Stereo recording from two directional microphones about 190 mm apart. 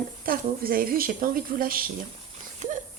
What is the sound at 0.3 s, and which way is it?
Speech, 50° right (ahead or behind).